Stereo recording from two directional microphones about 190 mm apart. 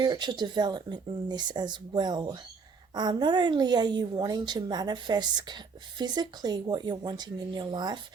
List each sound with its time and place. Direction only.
0.0 s a woman's voice: 25° right (ahead or behind)